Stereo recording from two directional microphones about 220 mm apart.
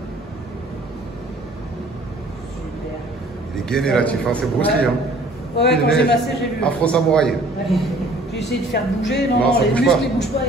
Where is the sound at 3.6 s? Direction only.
5° left (ahead or behind).